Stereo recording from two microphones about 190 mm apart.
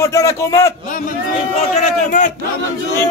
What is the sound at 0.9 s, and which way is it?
A man's voice, 40° left (ahead or behind).